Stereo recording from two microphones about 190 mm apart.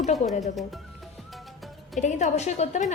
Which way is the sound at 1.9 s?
40° left (ahead or behind).